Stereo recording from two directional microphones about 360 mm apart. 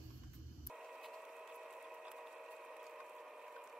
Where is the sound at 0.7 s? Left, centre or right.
Centre.